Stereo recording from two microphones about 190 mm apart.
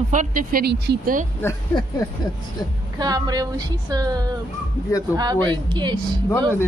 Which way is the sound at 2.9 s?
20° right (ahead or behind).